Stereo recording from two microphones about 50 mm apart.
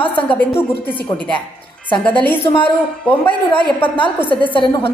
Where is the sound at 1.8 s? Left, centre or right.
Left.